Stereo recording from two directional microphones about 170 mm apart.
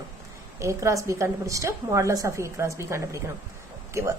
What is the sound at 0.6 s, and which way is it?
A woman's voice, 15° right (ahead or behind).